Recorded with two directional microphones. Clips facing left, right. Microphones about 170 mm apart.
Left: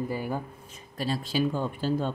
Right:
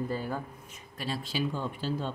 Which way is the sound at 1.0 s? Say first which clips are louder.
Left 5 dB; 40° left (ahead or behind).